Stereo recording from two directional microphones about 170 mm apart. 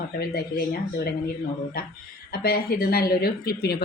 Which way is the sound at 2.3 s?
60° left (ahead or behind).